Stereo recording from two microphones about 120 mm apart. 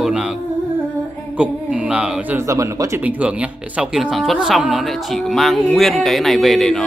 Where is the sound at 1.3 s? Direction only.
10° right (ahead or behind).